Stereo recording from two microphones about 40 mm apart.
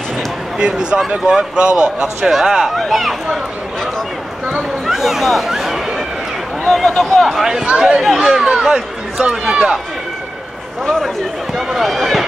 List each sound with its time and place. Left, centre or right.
0.6 s speech: right
2.8 s speech: centre
4.8 s speech: centre
6.7 s speech: centre
7.4 s speech: centre
8.0 s speech: centre
11.5 s speech: centre